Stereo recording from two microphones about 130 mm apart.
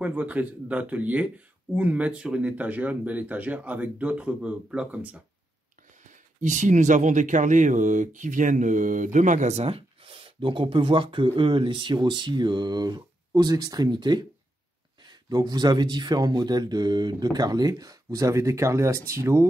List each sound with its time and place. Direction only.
0.0 s speech: 10° right (ahead or behind)
6.4 s speech: 70° right (ahead or behind); by 19.4 s 20° right (ahead or behind)